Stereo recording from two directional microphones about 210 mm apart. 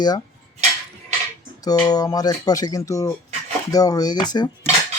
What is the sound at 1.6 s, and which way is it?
Speech, 20° left (ahead or behind).